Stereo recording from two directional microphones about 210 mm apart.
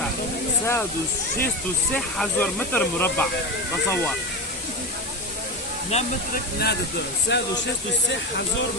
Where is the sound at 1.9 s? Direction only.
5° left (ahead or behind).